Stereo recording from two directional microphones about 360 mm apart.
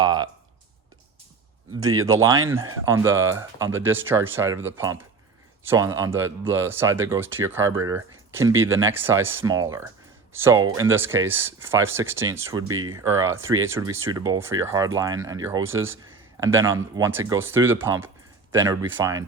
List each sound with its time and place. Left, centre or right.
0.0 s a sound: centre
2.0 s speech: centre
13.4 s speech: right
13.7 s speech: centre
15.6 s speech: right
16.4 s speech: centre